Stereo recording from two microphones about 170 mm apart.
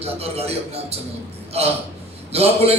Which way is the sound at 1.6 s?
35° right (ahead or behind).